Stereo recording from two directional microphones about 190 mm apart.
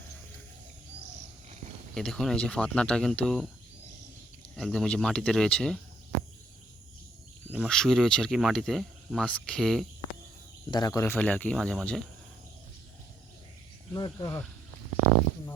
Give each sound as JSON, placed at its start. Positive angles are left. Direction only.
{"t": 2.0, "sound": "speech", "side_deg": 5}
{"t": 4.5, "sound": "speech", "side_deg": 0}
{"t": 7.5, "sound": "speech", "side_deg": 0}
{"t": 10.7, "sound": "speech", "side_deg": 20}
{"t": 13.9, "sound": "speech", "side_deg": 20}